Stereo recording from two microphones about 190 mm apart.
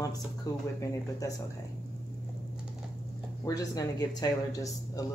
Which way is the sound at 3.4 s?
20° left (ahead or behind).